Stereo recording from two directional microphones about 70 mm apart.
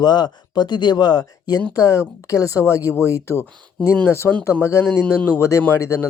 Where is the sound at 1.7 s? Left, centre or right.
Left.